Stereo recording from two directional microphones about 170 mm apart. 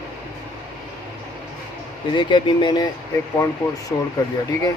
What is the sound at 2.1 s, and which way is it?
Speech, 30° left (ahead or behind).